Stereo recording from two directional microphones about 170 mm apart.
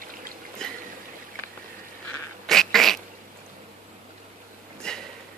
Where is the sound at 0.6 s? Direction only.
5° left (ahead or behind).